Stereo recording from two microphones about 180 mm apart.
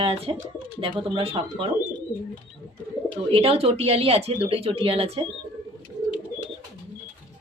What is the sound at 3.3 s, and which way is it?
A woman's voice, 35° right (ahead or behind).